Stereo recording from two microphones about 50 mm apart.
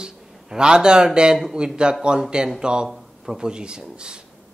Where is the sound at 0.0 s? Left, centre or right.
Centre.